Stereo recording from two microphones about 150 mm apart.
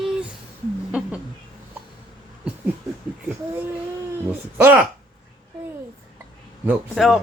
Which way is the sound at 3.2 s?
15° right (ahead or behind).